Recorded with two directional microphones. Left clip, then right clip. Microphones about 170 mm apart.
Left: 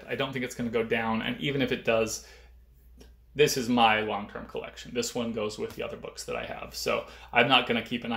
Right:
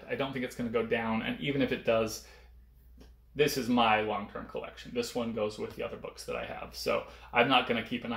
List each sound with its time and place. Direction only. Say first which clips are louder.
0.1 s speech: left 3 dB; 30° left (ahead or behind)
3.3 s speech: left 4 dB; 30° left (ahead or behind)